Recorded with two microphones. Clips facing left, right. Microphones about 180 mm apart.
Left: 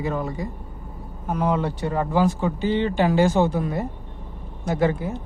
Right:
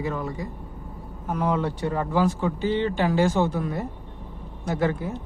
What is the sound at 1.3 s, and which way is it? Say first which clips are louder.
Speech: left 2 dB; 10° left (ahead or behind).